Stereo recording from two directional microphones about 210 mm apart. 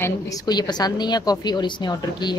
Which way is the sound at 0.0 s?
15° left (ahead or behind).